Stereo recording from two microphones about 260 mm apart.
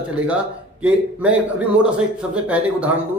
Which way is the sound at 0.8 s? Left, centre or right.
Centre.